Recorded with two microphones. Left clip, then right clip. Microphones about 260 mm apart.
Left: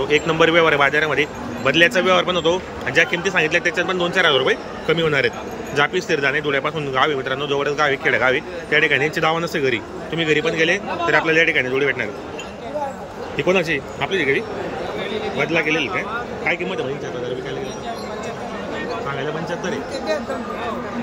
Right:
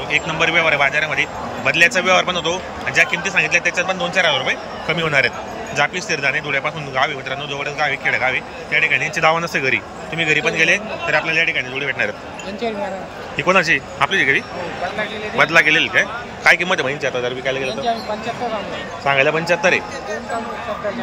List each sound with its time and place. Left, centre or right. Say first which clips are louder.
0.1 s speech: left 1 dB; centre
13.4 s a man's voice: right 4 dB; centre
16.4 s a man's voice: right 9 dB; right